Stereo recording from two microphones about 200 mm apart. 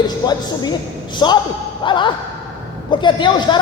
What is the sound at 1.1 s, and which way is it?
Speech, 20° left (ahead or behind).